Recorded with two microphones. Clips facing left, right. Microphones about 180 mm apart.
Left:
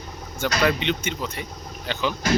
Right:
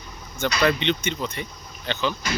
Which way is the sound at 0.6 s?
5° left (ahead or behind).